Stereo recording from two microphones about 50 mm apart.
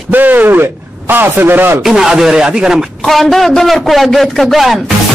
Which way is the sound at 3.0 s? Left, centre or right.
Centre.